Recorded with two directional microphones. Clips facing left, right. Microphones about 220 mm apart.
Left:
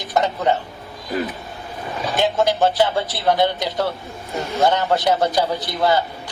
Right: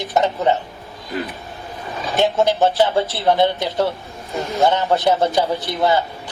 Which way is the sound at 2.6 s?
25° right (ahead or behind).